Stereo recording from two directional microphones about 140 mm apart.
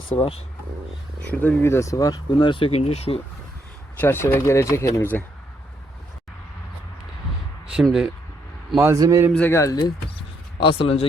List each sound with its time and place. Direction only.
0.2 s speech: 45° left (ahead or behind)
1.3 s speech: 10° left (ahead or behind); by 3.2 s 50° left (ahead or behind)
3.9 s speech: 15° left (ahead or behind)
7.7 s speech: 5° right (ahead or behind)
8.8 s a man's voice: 20° right (ahead or behind)
9.3 s speech: 15° left (ahead or behind)
10.6 s speech: 40° left (ahead or behind)